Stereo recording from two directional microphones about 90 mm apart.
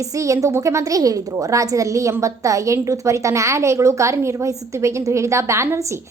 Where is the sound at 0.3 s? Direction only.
35° right (ahead or behind).